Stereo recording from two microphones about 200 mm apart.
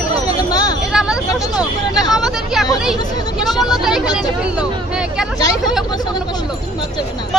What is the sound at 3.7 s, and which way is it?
Speech, centre (ahead or behind).